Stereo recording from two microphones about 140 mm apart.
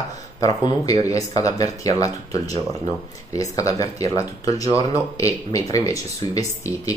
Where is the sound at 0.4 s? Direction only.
25° left (ahead or behind).